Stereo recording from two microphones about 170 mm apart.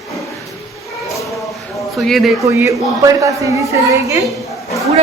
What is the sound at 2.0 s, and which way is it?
Speech, centre (ahead or behind).